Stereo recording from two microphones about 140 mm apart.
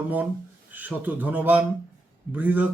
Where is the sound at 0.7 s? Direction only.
10° right (ahead or behind).